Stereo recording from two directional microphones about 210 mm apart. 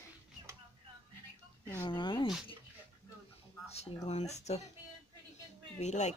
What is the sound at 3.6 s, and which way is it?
Speech, 30° left (ahead or behind).